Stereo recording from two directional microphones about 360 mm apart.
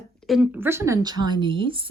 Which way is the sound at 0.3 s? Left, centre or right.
Centre.